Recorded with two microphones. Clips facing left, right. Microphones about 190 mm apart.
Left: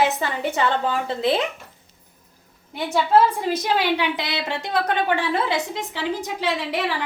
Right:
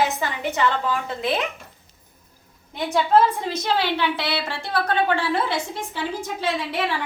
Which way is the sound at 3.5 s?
15° left (ahead or behind).